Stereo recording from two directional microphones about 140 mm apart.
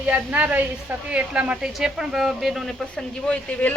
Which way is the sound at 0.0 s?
10° right (ahead or behind).